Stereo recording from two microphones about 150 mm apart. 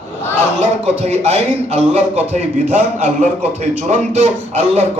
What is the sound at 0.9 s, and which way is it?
Speech, 45° right (ahead or behind).